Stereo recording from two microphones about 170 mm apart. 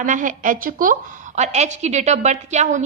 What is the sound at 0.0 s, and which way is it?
A woman's voice, 50° right (ahead or behind).